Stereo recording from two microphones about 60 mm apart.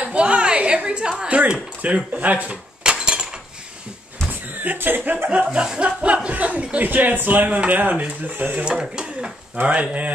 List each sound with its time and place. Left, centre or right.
0.0 s a sound: centre
1.5 s speech: right
2.8 s cutlery: centre
4.6 s speech: right